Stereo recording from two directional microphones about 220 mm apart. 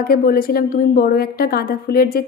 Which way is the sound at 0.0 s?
40° left (ahead or behind).